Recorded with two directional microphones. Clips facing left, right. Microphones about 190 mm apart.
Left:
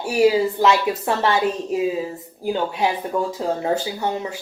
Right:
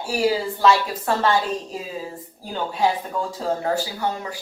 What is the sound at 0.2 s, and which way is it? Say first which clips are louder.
Speech: left 5 dB; 20° left (ahead or behind).